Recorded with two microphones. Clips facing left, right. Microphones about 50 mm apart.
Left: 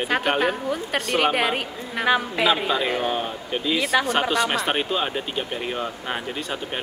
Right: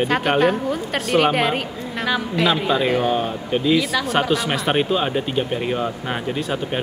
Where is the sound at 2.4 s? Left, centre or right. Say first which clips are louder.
Right 3 dB; centre.